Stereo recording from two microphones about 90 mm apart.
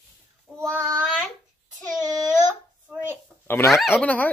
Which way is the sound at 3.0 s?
30° left (ahead or behind).